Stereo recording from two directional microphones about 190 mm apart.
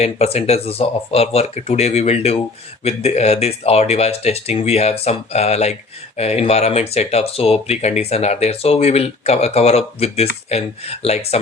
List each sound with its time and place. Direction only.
0.0 s speech: 35° left (ahead or behind)